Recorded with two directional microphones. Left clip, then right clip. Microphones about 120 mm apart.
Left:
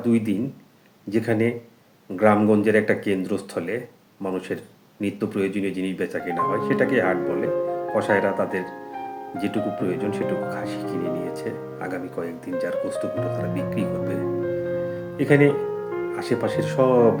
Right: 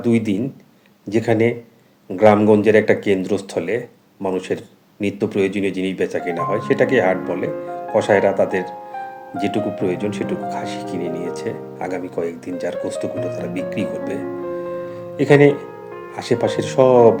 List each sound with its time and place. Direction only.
0.0 s speech: 30° right (ahead or behind)
15.2 s speech: 30° right (ahead or behind)